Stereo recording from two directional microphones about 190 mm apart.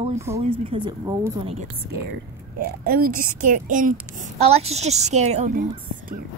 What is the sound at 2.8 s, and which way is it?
A woman's voice, 50° right (ahead or behind).